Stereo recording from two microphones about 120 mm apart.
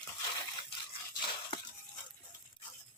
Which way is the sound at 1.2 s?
45° left (ahead or behind).